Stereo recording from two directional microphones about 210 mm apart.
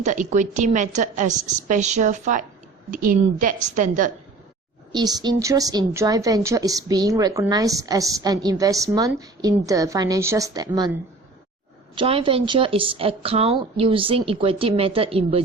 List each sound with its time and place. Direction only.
0.0 s a woman's voice: 35° right (ahead or behind)
4.9 s a woman's voice: 20° right (ahead or behind)
11.9 s a woman's voice: 25° right (ahead or behind)